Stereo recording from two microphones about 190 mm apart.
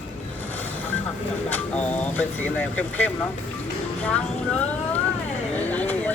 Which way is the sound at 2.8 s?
10° left (ahead or behind).